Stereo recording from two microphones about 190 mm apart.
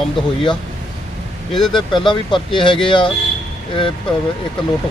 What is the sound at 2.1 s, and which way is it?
Speech, 25° left (ahead or behind).